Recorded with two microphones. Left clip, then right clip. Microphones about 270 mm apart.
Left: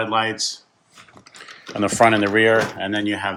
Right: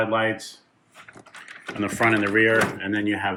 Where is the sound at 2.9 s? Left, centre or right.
Centre.